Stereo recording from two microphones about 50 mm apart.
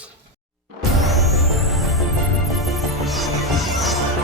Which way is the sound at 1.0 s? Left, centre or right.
Centre.